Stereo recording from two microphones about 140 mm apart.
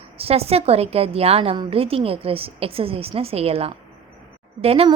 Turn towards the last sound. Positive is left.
turn(degrees=-45)  # may be behind; listen again after turning